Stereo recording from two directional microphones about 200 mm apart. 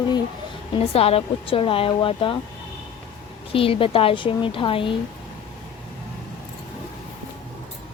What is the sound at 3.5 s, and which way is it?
Speech, 25° left (ahead or behind).